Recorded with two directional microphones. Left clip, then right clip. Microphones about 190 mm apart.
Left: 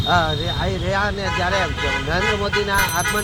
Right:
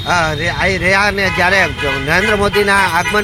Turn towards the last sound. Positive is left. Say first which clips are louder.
# right 7 dB
turn(degrees=-35)  # may be behind; listen again after turning